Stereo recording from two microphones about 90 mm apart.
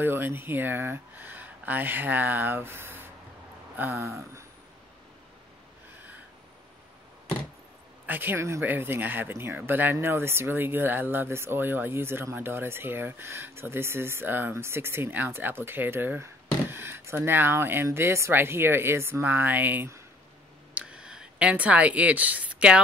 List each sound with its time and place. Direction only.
0.0 s speech: 25° right (ahead or behind)
8.1 s speech: 20° right (ahead or behind)
20.7 s a sound: 10° right (ahead or behind)